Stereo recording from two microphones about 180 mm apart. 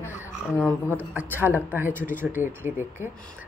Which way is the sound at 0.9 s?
10° right (ahead or behind).